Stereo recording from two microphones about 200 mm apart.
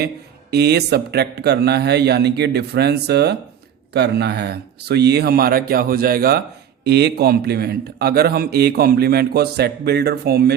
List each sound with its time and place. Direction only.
0.5 s a man's voice: 55° right (ahead or behind)